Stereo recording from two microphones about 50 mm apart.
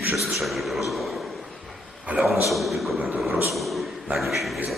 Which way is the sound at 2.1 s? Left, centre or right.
Right.